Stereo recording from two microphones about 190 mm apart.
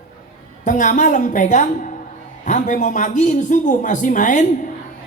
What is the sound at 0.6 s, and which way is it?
A man's voice, 40° left (ahead or behind).